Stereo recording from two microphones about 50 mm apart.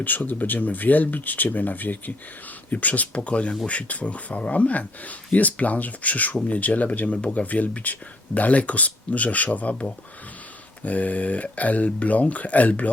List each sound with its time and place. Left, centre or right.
0.0 s speech: left